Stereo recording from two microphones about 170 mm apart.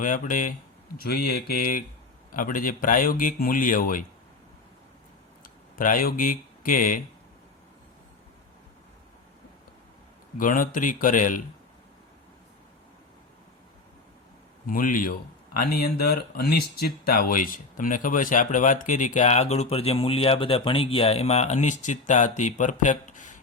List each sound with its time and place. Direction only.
0.0 s speech: 50° left (ahead or behind)
0.9 s speech: 65° left (ahead or behind)
5.4 s speech: 55° left (ahead or behind)
10.3 s speech: 55° left (ahead or behind)
14.7 s speech: 55° left (ahead or behind)